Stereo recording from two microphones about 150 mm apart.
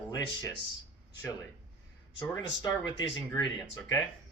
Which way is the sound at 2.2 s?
30° left (ahead or behind).